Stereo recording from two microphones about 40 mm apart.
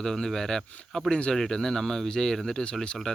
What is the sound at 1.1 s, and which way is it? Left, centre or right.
Speech, left.